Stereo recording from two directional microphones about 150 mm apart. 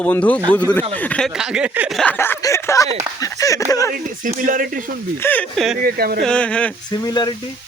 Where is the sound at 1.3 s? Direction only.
5° right (ahead or behind).